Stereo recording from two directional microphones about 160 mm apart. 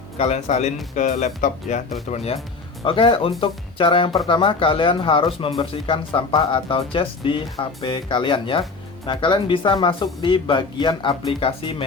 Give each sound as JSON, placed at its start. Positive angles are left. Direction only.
{"t": 0.2, "sound": "speech", "side_deg": 40}